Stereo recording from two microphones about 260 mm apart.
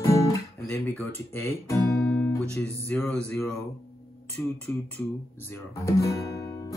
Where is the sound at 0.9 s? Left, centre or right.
Centre.